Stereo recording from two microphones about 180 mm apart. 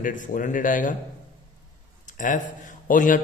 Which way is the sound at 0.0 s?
45° left (ahead or behind).